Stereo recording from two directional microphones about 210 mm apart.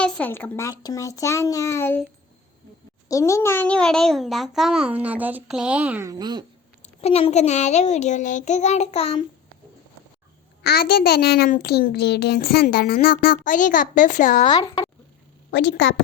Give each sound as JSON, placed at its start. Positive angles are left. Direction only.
{"t": 0.0, "sound": "a child's voice", "side_deg": 10}
{"t": 3.1, "sound": "a child's voice", "side_deg": 15}
{"t": 6.8, "sound": "a child's voice", "side_deg": 30}
{"t": 10.6, "sound": "a child's voice", "side_deg": 50}
{"t": 14.4, "sound": "speech", "side_deg": 20}
{"t": 15.4, "sound": "a woman's voice", "side_deg": 60}